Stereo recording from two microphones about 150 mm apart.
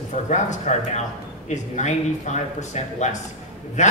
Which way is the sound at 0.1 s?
50° left (ahead or behind).